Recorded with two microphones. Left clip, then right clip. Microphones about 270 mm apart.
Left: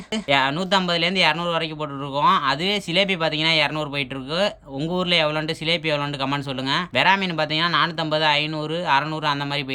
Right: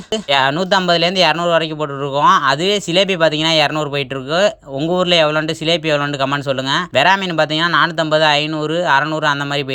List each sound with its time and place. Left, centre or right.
0.1 s speech: centre